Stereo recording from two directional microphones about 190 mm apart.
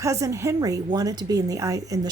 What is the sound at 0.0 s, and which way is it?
A woman's voice, 15° right (ahead or behind).